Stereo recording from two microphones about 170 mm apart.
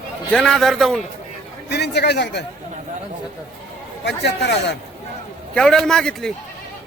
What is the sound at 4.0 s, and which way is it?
Speech, 80° left.